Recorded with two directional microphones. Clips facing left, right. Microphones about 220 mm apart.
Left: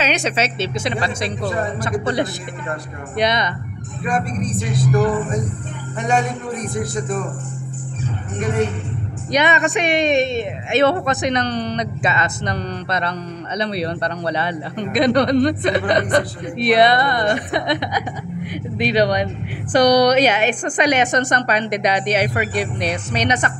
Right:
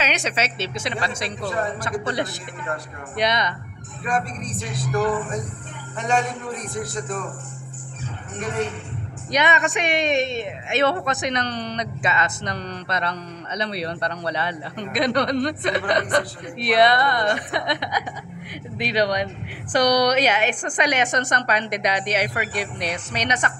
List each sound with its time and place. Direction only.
0.0 s a woman's voice: 30° left (ahead or behind)
4.0 s speech: 10° left (ahead or behind)
9.3 s speech: 30° left (ahead or behind)